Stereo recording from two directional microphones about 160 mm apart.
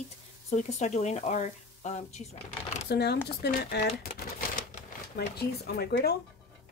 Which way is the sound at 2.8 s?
90° left.